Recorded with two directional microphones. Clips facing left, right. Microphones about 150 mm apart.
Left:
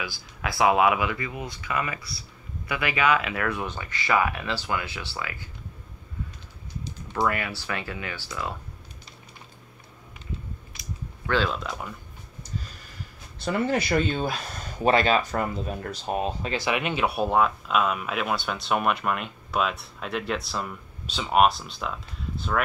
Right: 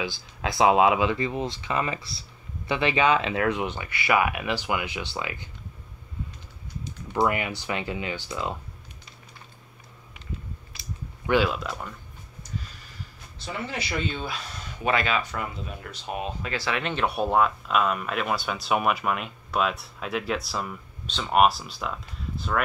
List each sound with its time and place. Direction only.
0.0 s speech: 20° right (ahead or behind)
7.1 s speech: 20° right (ahead or behind)
11.2 s speech: 10° right (ahead or behind)
13.5 s speech: 50° left (ahead or behind); by 16.5 s 35° left (ahead or behind)
16.5 s speech: 15° left (ahead or behind); by 22.6 s centre (ahead or behind)